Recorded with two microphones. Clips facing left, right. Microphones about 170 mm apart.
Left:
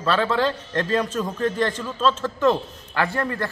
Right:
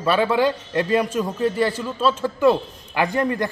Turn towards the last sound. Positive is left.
turn(degrees=-15)  # may be behind; listen again after turning